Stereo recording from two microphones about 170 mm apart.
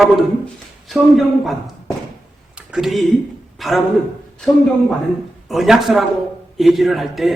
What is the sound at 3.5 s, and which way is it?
Speech, centre (ahead or behind).